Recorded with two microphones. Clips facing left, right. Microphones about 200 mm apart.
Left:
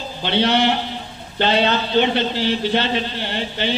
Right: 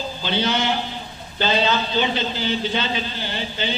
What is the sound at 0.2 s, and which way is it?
A man's voice, 65° left (ahead or behind).